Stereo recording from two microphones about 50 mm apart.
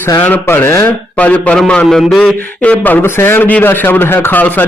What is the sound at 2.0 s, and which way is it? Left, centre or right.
Speech, centre.